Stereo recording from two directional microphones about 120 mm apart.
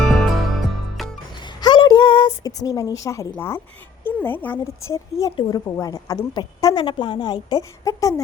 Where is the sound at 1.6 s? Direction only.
40° left (ahead or behind); by 3.6 s 20° left (ahead or behind).